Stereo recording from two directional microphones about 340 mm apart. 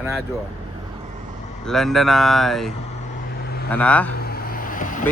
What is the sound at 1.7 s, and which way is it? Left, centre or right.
Speech, centre.